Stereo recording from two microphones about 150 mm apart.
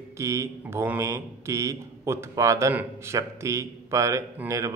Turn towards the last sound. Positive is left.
turn(degrees=-20)  # may be behind; listen again after turning